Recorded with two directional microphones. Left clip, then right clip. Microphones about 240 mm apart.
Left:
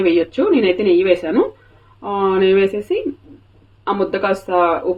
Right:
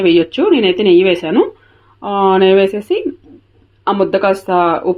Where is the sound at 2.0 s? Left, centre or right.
Right.